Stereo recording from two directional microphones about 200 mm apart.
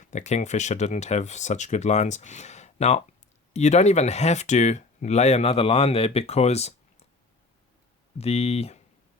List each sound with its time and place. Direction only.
0.0 s speech: 40° left (ahead or behind)
8.2 s speech: 30° left (ahead or behind)